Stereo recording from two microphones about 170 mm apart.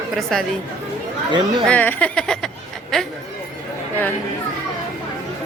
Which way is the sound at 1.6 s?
10° left (ahead or behind).